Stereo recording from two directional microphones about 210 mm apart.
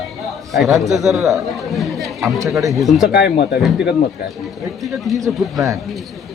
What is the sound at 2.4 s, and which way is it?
Speech, 15° right (ahead or behind).